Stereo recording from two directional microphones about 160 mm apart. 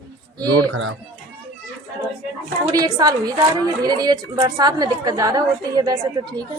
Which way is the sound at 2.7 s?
25° right (ahead or behind).